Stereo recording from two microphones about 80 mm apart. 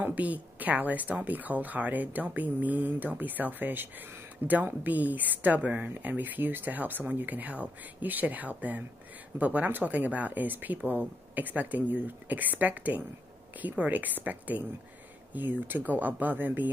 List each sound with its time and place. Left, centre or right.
0.0 s speech: centre